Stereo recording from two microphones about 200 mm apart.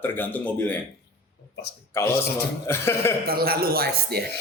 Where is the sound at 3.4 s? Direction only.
50° right (ahead or behind).